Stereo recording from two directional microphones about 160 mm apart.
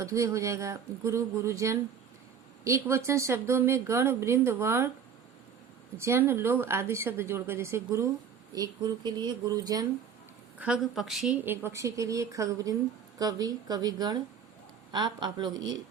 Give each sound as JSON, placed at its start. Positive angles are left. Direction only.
{"t": 0.0, "sound": "speech", "side_deg": -20}
{"t": 6.0, "sound": "speech", "side_deg": -15}
{"t": 10.6, "sound": "a woman's voice", "side_deg": -5}
{"t": 11.4, "sound": "speech", "side_deg": -15}